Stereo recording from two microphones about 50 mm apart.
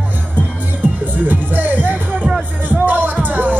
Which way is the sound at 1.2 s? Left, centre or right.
Right.